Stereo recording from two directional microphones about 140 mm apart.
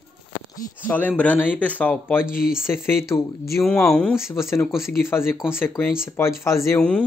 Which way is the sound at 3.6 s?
5° left (ahead or behind).